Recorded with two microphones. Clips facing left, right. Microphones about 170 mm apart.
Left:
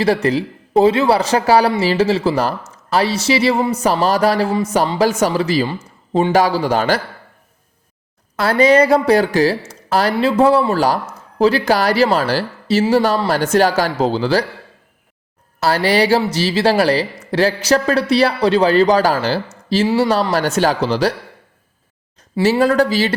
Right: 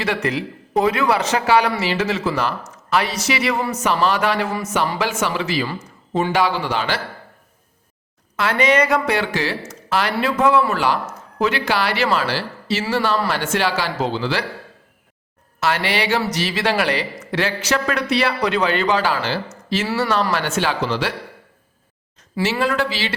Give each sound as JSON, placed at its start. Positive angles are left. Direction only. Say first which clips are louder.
{"t": 0.0, "sound": "speech", "louder": "left 6 dB", "side_deg": 35}
{"t": 5.6, "sound": "speech", "louder": "left 4 dB", "side_deg": 25}
{"t": 6.3, "sound": "speech", "louder": "left 6 dB", "side_deg": 40}
{"t": 8.4, "sound": "speech", "louder": "left 5 dB", "side_deg": 35}
{"t": 15.6, "sound": "speech", "louder": "left 6 dB", "side_deg": 35}
{"t": 22.4, "sound": "speech", "louder": "left 7 dB", "side_deg": 35}